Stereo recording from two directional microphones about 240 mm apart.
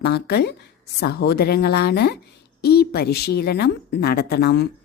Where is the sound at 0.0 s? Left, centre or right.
Left.